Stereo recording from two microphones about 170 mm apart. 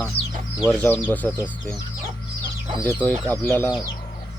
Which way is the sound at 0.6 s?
5° left (ahead or behind).